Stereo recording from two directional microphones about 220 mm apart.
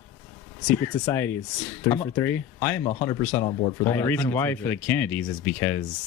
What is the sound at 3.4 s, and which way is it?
Speech, 20° left (ahead or behind).